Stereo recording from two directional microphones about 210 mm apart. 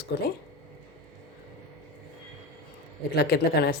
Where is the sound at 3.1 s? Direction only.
50° left (ahead or behind).